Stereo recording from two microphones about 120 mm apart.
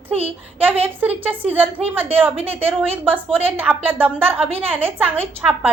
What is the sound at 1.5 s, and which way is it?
A woman's voice, 15° right (ahead or behind).